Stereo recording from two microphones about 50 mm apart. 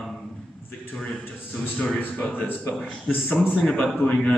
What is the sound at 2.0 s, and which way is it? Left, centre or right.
Speech, left.